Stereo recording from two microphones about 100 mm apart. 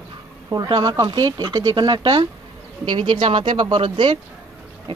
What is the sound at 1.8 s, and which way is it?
Speech, 45° right (ahead or behind).